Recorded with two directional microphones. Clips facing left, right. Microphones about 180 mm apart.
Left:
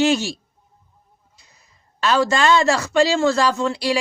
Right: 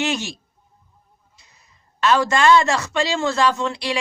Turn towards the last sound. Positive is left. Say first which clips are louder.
# left 3 dB
turn(degrees=40)  # may be behind; listen again after turning